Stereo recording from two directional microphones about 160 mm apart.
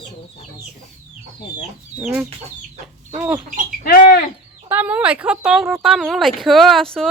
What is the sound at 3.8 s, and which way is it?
Bird, 65° left (ahead or behind).